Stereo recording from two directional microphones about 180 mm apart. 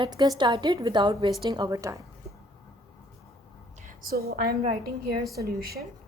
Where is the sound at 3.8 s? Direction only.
50° right (ahead or behind).